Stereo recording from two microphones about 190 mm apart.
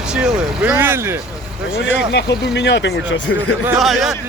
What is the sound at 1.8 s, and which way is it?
Speech, 70° left (ahead or behind).